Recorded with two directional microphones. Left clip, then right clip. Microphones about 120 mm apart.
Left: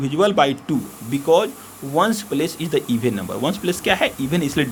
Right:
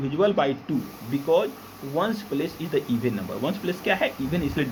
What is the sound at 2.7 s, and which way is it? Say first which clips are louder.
Speech: left 3 dB; 90° left.